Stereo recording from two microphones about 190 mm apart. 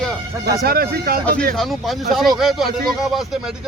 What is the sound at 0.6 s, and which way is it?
Speech, 55° right (ahead or behind).